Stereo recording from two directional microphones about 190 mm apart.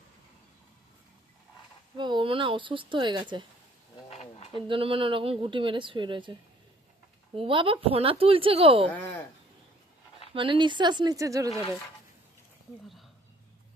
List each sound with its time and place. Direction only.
2.0 s speech: 25° right (ahead or behind)
4.1 s a sound: 35° left (ahead or behind)
4.5 s speech: 30° right (ahead or behind)
7.3 s speech: 30° right (ahead or behind)
10.3 s speech: 25° right (ahead or behind)